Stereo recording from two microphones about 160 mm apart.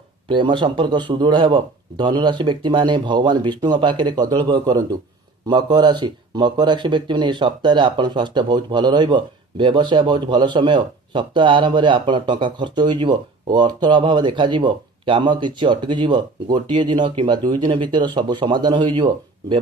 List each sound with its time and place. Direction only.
0.3 s speech: 30° right (ahead or behind)